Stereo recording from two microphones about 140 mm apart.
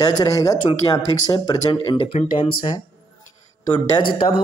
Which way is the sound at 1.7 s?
40° left (ahead or behind).